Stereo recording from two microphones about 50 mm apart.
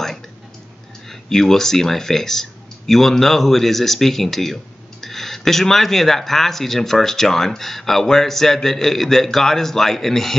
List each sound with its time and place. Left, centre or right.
1.3 s speech: centre